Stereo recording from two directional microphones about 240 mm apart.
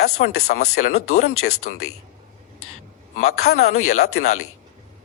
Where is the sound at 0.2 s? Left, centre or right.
Left.